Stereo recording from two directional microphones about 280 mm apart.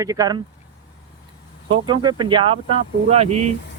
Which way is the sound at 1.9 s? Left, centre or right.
Centre.